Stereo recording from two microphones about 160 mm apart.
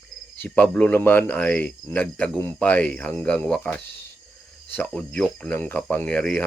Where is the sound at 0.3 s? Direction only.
10° left (ahead or behind).